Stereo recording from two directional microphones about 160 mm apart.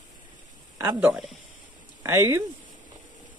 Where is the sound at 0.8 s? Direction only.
15° right (ahead or behind).